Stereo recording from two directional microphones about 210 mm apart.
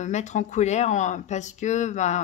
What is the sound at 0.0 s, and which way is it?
Speech, 35° left (ahead or behind).